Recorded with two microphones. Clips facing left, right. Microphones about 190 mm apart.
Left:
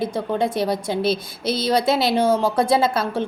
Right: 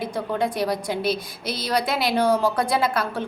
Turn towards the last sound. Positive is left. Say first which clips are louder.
# left 4 dB
turn(degrees=25)  # may be behind; listen again after turning